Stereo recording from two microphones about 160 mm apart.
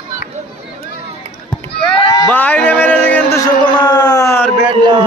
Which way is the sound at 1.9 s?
25° left (ahead or behind).